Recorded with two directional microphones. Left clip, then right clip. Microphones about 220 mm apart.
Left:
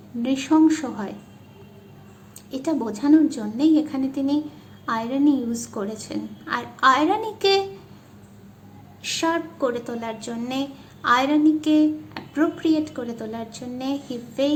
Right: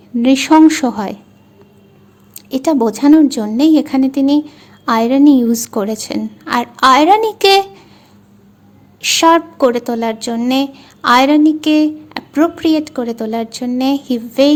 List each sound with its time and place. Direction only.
0.2 s a woman's voice: 45° right (ahead or behind)
2.5 s a woman's voice: 45° right (ahead or behind)
9.0 s a woman's voice: 50° right (ahead or behind)